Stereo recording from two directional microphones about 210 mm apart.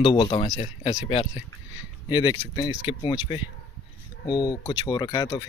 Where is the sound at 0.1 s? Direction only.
25° left (ahead or behind).